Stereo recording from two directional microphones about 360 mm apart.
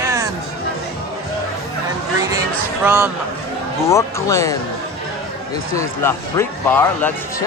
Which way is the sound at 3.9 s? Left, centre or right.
Centre.